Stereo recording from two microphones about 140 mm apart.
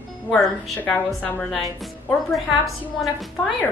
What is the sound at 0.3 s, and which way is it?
A woman's voice, 10° left (ahead or behind).